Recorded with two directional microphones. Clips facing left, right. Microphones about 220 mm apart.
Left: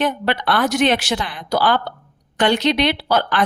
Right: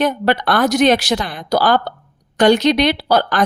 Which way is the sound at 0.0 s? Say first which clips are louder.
Right 4 dB; 40° right (ahead or behind).